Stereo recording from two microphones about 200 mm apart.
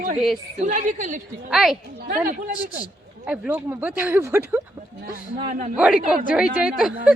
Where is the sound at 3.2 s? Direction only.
5° right (ahead or behind).